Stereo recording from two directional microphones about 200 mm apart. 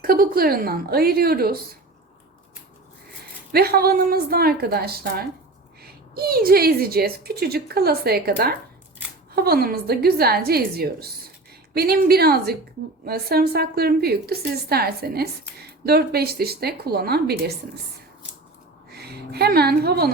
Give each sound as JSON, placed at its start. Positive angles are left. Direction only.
{"t": 0.0, "sound": "a woman's voice", "side_deg": -45}
{"t": 3.5, "sound": "a woman's voice", "side_deg": -50}
{"t": 18.9, "sound": "a woman's voice", "side_deg": -55}